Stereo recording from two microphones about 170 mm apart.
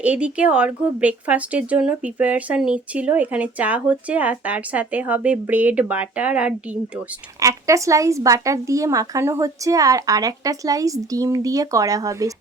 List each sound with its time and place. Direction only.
0.0 s speech: 5° right (ahead or behind)
7.3 s speech: 20° right (ahead or behind)